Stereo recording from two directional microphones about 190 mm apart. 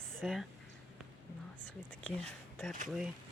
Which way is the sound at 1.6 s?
5° left (ahead or behind).